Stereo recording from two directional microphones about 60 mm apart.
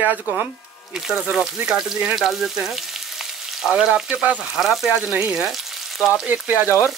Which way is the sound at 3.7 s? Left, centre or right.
Centre.